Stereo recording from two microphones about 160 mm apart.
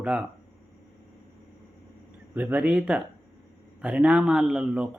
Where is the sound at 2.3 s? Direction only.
10° right (ahead or behind).